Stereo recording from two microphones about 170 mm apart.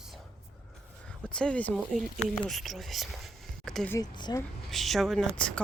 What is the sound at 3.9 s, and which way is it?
Speech, 25° left (ahead or behind).